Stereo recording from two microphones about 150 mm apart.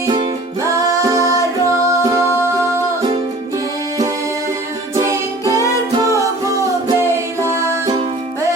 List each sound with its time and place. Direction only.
1.0 s music: 20° right (ahead or behind)
4.9 s music: 20° right (ahead or behind)